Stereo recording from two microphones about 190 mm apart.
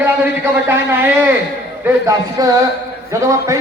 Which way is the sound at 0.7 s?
10° right (ahead or behind).